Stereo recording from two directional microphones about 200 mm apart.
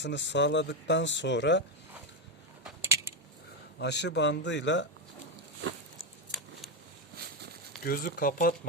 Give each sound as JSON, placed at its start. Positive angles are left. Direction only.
{"t": 0.0, "sound": "speech", "side_deg": 60}
{"t": 3.8, "sound": "speech", "side_deg": 60}
{"t": 7.9, "sound": "speech", "side_deg": 45}